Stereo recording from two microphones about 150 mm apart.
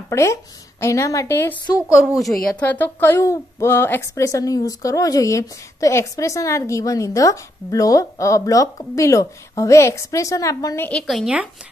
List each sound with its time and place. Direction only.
0.1 s speech: 20° left (ahead or behind)
2.0 s speech: centre (ahead or behind); by 10.9 s 25° left (ahead or behind)
10.9 s a woman's voice: 5° left (ahead or behind)